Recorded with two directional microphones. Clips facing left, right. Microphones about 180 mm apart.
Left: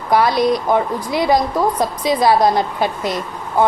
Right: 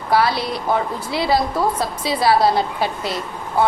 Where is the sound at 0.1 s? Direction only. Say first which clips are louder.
Left 4 dB; 15° left (ahead or behind).